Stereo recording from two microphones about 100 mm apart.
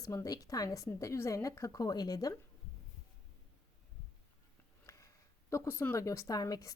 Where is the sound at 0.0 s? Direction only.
35° left (ahead or behind).